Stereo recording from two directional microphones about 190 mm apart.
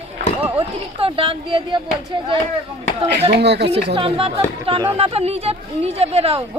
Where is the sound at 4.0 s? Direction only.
30° right (ahead or behind).